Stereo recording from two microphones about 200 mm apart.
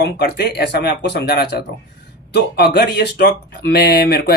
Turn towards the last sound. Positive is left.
turn(degrees=50)  # may be behind; listen again after turning